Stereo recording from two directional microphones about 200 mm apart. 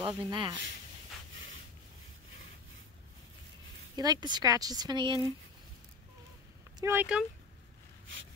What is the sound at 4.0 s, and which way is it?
Speech, 20° right (ahead or behind).